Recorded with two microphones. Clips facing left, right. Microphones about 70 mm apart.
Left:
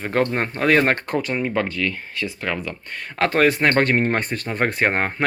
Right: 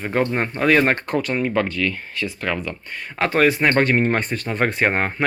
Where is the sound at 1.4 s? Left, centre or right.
Left.